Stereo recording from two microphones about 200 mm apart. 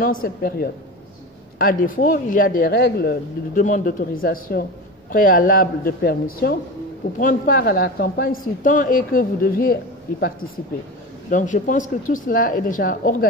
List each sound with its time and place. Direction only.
0.0 s speech: 45° left (ahead or behind)
11.2 s speech: 40° left (ahead or behind)